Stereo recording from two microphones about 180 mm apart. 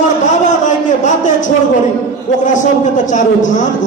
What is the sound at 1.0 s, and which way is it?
A man's voice, 45° left (ahead or behind).